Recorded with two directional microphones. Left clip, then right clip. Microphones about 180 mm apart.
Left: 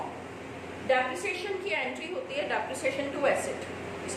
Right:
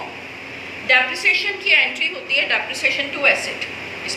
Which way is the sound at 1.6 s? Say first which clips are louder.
Right 16 dB; 50° left (ahead or behind).